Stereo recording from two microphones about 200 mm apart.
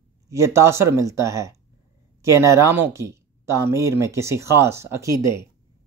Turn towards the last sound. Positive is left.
turn(degrees=-15)  # may be behind; listen again after turning